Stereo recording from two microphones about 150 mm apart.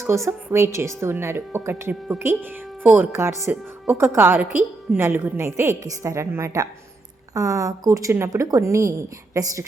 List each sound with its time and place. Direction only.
0.0 s a woman's voice: 15° right (ahead or behind)